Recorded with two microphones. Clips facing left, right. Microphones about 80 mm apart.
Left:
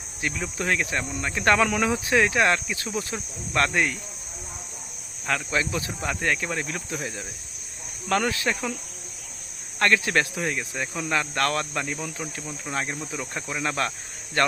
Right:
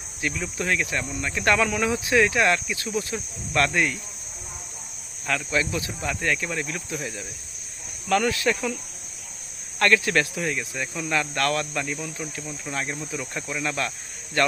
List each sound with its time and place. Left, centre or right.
0.2 s speech: left
5.2 s speech: left
9.7 s speech: left